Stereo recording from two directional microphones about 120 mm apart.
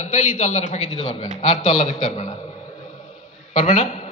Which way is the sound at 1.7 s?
75° left (ahead or behind).